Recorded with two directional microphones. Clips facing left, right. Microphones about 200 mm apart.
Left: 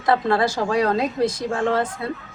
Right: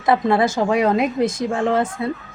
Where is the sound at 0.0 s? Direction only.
20° right (ahead or behind).